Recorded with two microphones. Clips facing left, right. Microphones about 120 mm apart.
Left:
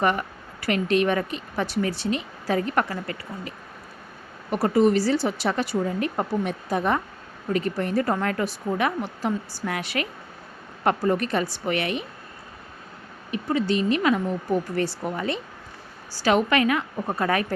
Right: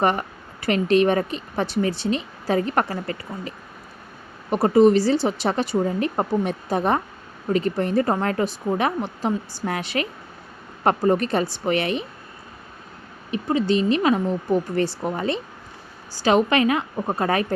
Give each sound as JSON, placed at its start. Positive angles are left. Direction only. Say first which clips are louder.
{"t": 0.0, "sound": "speech", "louder": "right 2 dB", "side_deg": -30}
{"t": 4.5, "sound": "a woman's voice", "louder": "right 4 dB", "side_deg": -20}
{"t": 13.3, "sound": "a woman's voice", "louder": "right 3 dB", "side_deg": -25}